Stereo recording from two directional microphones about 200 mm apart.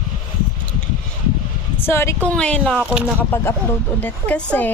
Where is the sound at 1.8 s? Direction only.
10° left (ahead or behind); by 3.2 s 5° right (ahead or behind).